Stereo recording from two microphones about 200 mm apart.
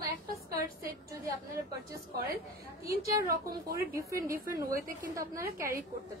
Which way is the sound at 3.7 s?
15° right (ahead or behind).